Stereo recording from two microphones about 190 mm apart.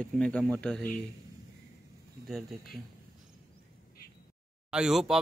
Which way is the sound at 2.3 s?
Centre (ahead or behind).